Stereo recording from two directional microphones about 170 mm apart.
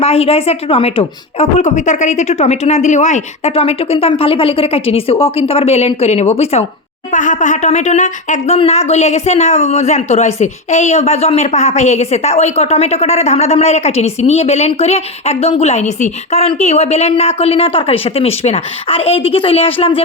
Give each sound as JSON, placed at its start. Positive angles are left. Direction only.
{"t": 0.0, "sound": "a woman's voice", "side_deg": 35}